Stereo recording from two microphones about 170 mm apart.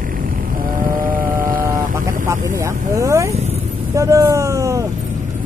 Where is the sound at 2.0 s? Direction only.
15° right (ahead or behind).